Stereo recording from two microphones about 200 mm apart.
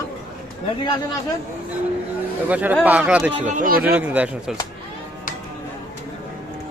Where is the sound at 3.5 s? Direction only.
45° right (ahead or behind).